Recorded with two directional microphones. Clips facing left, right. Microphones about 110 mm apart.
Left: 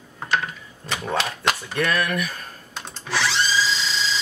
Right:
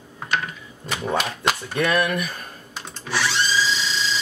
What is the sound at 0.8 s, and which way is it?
Speech, centre (ahead or behind).